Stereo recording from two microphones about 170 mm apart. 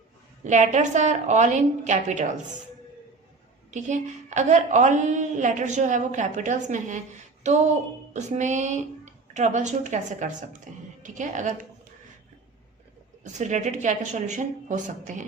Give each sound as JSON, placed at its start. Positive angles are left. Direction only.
{"t": 0.4, "sound": "a woman's voice", "side_deg": -45}
{"t": 3.7, "sound": "a woman's voice", "side_deg": -45}
{"t": 13.2, "sound": "a woman's voice", "side_deg": -45}